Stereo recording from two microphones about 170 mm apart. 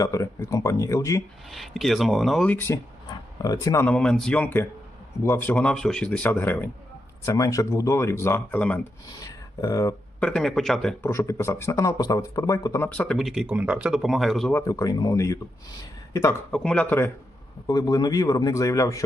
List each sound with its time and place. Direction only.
0.0 s speech: 20° left (ahead or behind)
1.5 s speech: centre (ahead or behind)
3.1 s a sound: 20° left (ahead or behind)
3.8 s speech: 5° left (ahead or behind)
9.6 s speech: 20° left (ahead or behind)
10.2 s speech: 5° left (ahead or behind)
11.0 s speech: 15° left (ahead or behind)
14.5 s speech: 20° left (ahead or behind)
16.5 s speech: 5° left (ahead or behind)